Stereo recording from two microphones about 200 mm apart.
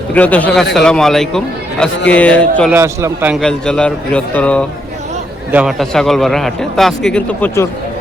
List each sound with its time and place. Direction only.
0.1 s a man's voice: 5° left (ahead or behind)
2.7 s a man's voice: 10° right (ahead or behind); by 4.6 s 5° left (ahead or behind)
5.5 s a man's voice: 5° right (ahead or behind); by 7.7 s 10° left (ahead or behind)